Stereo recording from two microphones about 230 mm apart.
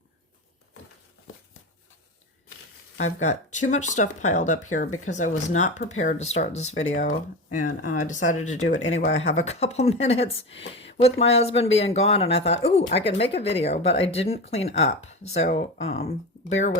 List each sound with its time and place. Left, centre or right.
3.0 s speech: left